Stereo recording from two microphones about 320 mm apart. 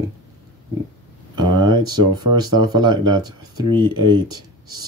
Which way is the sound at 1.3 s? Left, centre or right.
Centre.